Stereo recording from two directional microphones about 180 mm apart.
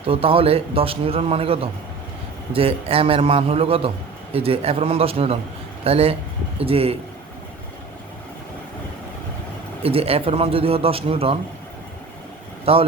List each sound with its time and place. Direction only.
0.0 s a man's voice: 30° right (ahead or behind)
9.8 s a man's voice: 30° right (ahead or behind)
12.7 s a man's voice: 35° right (ahead or behind)